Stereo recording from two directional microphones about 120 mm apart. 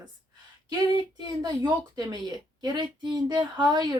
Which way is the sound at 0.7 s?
35° right (ahead or behind).